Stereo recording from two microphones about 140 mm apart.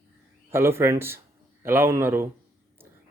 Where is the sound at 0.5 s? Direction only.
15° right (ahead or behind).